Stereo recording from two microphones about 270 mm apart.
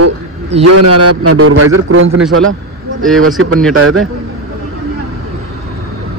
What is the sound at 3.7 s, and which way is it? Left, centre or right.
Speech, right.